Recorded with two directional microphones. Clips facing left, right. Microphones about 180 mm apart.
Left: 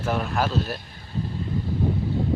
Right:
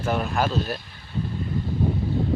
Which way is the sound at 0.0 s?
Centre (ahead or behind).